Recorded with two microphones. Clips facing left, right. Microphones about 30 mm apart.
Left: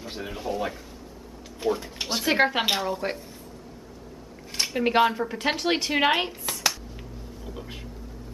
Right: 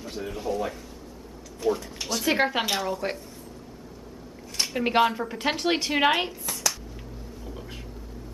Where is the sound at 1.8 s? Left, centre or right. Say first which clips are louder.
Left 1 dB; left.